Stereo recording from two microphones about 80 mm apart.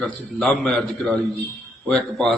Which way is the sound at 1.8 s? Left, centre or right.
Centre.